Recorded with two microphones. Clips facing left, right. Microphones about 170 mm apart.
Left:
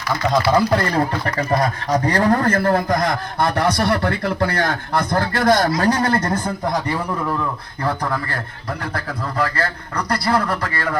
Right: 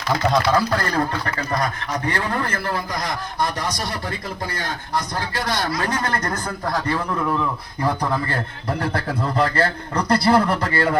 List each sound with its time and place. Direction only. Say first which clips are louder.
0.5 s speech: left 3 dB; 25° left (ahead or behind); by 5.7 s 45° left (ahead or behind)
5.8 s a man's voice: left 6 dB; 35° left (ahead or behind); by 7.0 s 15° left (ahead or behind)
7.9 s speech: even; 20° right (ahead or behind)
10.1 s speech: right 3 dB; 25° right (ahead or behind)